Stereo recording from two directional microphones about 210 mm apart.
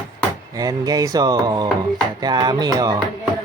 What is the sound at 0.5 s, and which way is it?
Speech, 15° right (ahead or behind).